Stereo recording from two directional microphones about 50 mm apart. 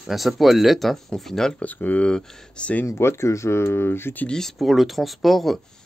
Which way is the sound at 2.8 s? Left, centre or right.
Left.